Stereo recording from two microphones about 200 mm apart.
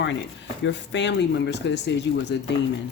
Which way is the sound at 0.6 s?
65° left (ahead or behind).